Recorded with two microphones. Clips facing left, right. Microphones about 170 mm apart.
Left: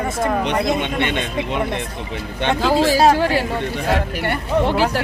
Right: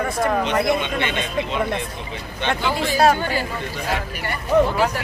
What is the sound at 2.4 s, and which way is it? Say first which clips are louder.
Speech: left 6 dB; 80° left.